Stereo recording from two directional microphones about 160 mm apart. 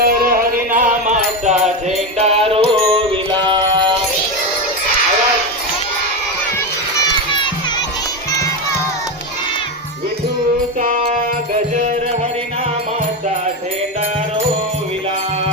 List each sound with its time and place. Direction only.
0.0 s music: 65° right (ahead or behind); by 3.9 s 30° right (ahead or behind)